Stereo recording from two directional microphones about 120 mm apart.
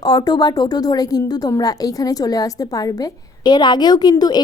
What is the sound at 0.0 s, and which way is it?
A woman's voice, 35° left (ahead or behind).